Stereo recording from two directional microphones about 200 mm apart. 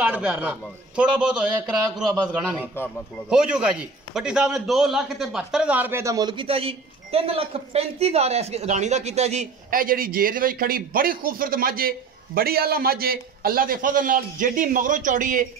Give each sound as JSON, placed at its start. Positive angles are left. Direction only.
{"t": 0.0, "sound": "a man's voice", "side_deg": -5}